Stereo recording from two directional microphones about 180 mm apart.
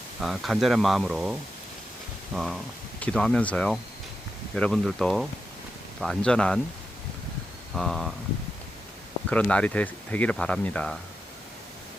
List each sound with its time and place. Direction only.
0.2 s speech: centre (ahead or behind)
7.8 s speech: centre (ahead or behind)
9.3 s speech: 5° left (ahead or behind)